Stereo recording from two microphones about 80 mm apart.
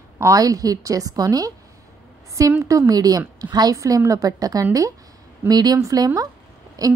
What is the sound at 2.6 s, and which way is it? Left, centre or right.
A woman's voice, right.